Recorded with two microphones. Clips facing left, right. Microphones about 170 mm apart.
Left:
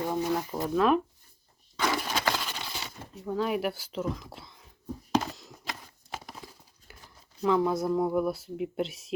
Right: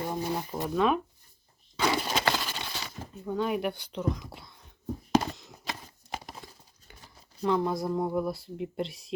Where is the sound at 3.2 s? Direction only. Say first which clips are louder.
Even; centre (ahead or behind).